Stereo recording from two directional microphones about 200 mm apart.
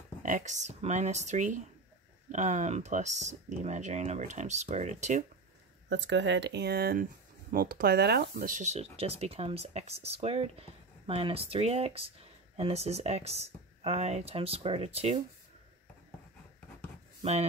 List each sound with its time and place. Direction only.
0.2 s speech: 40° right (ahead or behind)
5.9 s speech: 65° right (ahead or behind); by 15.2 s 30° right (ahead or behind)
17.2 s speech: 30° right (ahead or behind)